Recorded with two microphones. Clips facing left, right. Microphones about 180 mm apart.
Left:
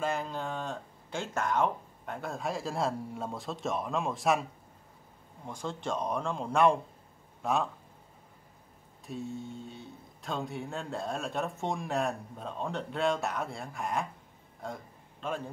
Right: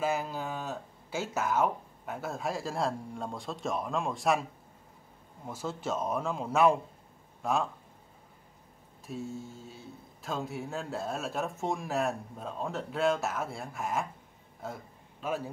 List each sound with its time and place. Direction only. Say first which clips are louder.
0.0 s speech: right 1 dB; 5° right (ahead or behind)
5.5 s speech: right 1 dB; 5° right (ahead or behind)
9.0 s speech: even; centre (ahead or behind)
14.6 s a sound: even; 5° right (ahead or behind)